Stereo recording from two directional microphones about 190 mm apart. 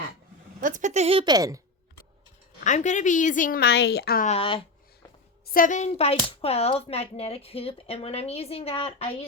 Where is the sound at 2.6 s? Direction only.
40° left (ahead or behind); by 4.2 s 55° left (ahead or behind).